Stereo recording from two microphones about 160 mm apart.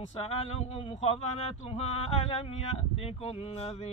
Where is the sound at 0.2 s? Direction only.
40° left (ahead or behind).